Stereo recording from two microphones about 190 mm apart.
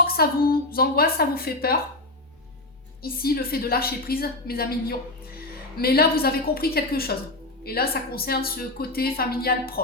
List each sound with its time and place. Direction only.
0.1 s a woman's voice: 55° left (ahead or behind)
3.0 s a woman's voice: 50° left (ahead or behind)